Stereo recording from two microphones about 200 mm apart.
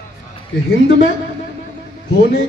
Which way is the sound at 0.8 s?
65° left (ahead or behind).